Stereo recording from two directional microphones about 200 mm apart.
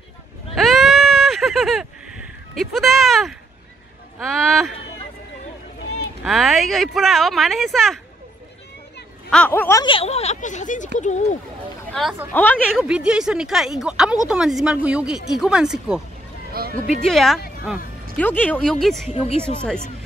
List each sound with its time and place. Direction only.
0.6 s a sound: centre (ahead or behind)
4.2 s speech: centre (ahead or behind)
6.2 s speech: centre (ahead or behind)
9.3 s speech: 5° left (ahead or behind)
9.8 s speech: 30° left (ahead or behind)
11.9 s speech: centre (ahead or behind)
12.8 s speech: 5° right (ahead or behind)
16.5 s speech: 45° right (ahead or behind)
17.0 s speech: centre (ahead or behind)